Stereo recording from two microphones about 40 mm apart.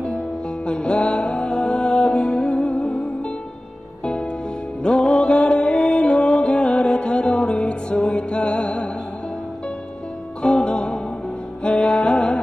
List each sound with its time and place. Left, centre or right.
0.7 s music: left
10.4 s music: left